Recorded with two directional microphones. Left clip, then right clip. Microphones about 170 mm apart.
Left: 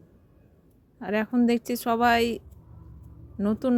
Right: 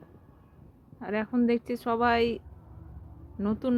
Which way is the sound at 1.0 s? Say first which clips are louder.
Left 3 dB; 50° left (ahead or behind).